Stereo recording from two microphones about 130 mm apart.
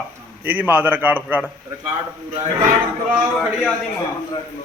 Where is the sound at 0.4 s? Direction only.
15° right (ahead or behind).